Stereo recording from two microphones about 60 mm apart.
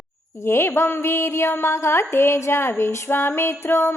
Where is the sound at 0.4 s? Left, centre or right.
Left.